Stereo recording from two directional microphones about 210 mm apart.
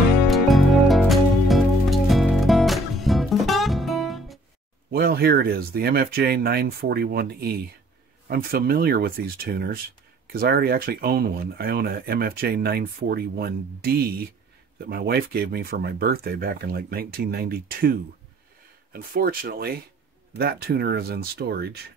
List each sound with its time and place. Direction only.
0.3 s music: centre (ahead or behind)
4.9 s speech: 45° right (ahead or behind)